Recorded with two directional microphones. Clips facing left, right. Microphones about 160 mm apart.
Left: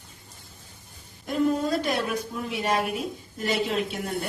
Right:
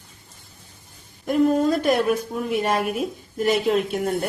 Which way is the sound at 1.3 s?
50° right (ahead or behind).